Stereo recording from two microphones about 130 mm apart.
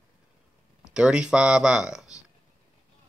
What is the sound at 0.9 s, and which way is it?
Speech, 5° right (ahead or behind).